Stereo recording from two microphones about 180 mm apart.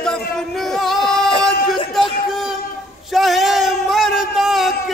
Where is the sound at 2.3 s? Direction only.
Centre (ahead or behind).